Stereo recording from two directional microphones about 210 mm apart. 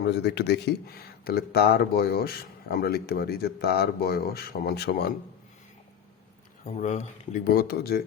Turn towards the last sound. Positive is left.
turn(degrees=45)  # may be behind; listen again after turning